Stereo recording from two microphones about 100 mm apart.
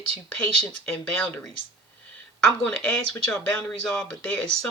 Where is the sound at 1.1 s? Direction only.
20° left (ahead or behind).